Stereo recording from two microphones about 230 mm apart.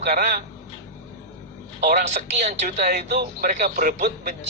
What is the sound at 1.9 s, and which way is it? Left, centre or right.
Speech, right.